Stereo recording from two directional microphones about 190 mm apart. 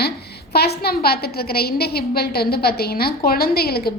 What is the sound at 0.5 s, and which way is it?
A woman's voice, 55° left (ahead or behind).